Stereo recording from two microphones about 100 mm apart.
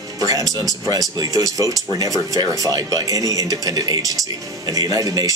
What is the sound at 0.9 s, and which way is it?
Speech, 35° right (ahead or behind).